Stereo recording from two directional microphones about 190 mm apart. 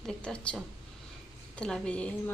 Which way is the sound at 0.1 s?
5° left (ahead or behind).